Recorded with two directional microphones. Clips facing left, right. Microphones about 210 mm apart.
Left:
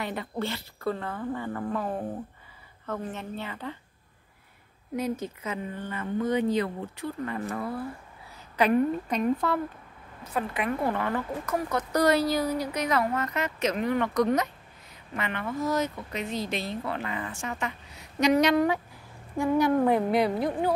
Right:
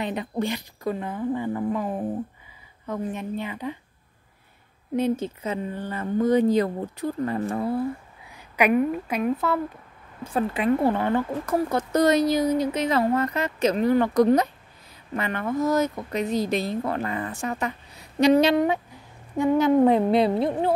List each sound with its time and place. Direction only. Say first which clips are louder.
0.0 s a woman's voice: right 5 dB; 20° right (ahead or behind)
4.9 s speech: right 6 dB; 25° right (ahead or behind)
8.5 s a woman's voice: right 2 dB; 10° right (ahead or behind)
10.2 s speech: right 6 dB; 30° right (ahead or behind)